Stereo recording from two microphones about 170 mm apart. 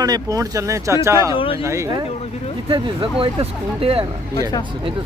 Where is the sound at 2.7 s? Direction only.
30° right (ahead or behind).